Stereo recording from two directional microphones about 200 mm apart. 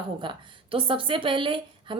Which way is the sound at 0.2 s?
25° right (ahead or behind).